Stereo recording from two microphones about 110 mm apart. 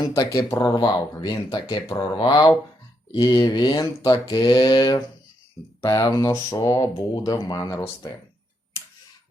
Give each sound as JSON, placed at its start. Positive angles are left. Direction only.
{"t": 0.0, "sound": "speech", "side_deg": 35}